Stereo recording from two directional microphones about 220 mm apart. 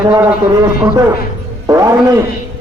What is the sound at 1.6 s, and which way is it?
Speech, 15° right (ahead or behind).